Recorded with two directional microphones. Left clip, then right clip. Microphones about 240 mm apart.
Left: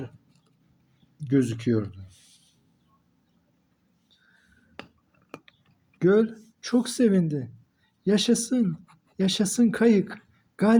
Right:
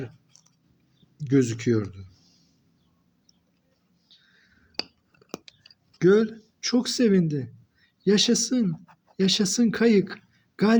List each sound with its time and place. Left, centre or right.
1.2 s speech: right
6.0 s speech: right